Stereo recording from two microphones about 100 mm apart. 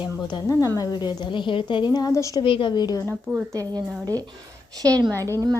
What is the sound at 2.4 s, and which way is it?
Speech, 60° left (ahead or behind).